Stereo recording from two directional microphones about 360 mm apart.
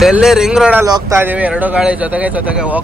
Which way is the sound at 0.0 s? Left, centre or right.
Centre.